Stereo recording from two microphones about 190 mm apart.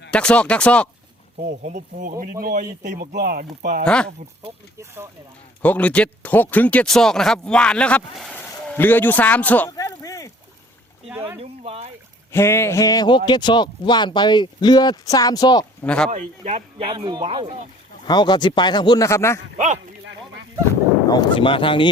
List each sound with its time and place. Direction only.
0.1 s speech: 5° left (ahead or behind)
1.4 s speech: 40° right (ahead or behind)
3.8 s speech: 5° left (ahead or behind)
5.6 s speech: 5° left (ahead or behind)
9.7 s a sound: 20° left (ahead or behind)
11.1 s speech: 10° right (ahead or behind)
11.3 s speech: 30° right (ahead or behind)
12.3 s speech: 15° left (ahead or behind)
15.8 s speech: 5° left (ahead or behind)
16.0 s speech: 40° right (ahead or behind)
18.0 s speech: 20° left (ahead or behind)
19.5 s speech: 40° right (ahead or behind)
21.1 s speech: 25° left (ahead or behind)